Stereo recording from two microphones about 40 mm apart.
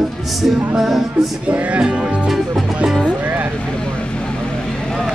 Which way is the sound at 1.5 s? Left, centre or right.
Right.